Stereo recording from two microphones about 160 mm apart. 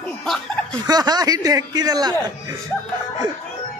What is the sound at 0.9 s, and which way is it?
Speech, 25° right (ahead or behind).